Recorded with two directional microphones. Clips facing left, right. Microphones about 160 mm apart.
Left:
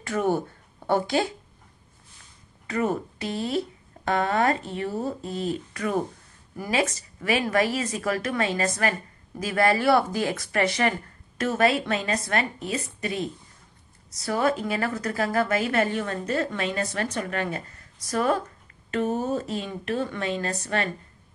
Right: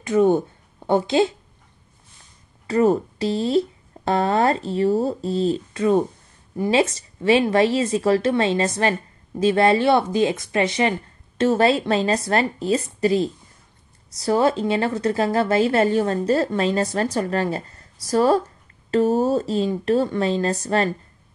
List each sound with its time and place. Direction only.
0.0 s speech: 20° right (ahead or behind)
2.6 s a woman's voice: 30° right (ahead or behind)